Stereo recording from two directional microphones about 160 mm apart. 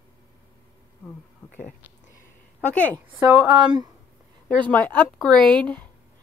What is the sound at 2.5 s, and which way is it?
Speech, 10° left (ahead or behind).